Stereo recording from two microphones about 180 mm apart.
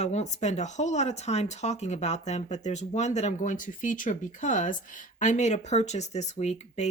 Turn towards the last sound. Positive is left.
turn(degrees=40)  # may be behind; listen again after turning